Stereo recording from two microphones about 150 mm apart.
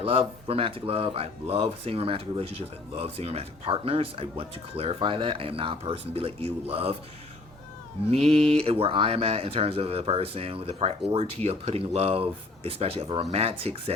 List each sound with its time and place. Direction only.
0.0 s speech: 40° right (ahead or behind)
8.1 s speech: 40° right (ahead or behind)